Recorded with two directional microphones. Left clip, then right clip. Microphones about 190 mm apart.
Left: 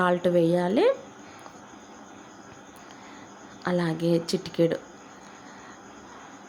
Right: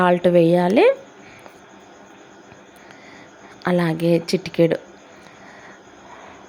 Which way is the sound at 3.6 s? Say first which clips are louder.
Right 7 dB; 25° right (ahead or behind).